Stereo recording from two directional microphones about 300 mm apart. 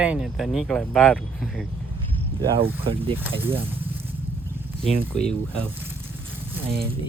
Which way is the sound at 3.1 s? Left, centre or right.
Centre.